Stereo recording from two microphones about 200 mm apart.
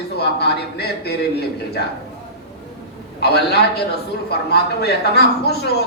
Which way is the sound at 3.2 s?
55° left (ahead or behind).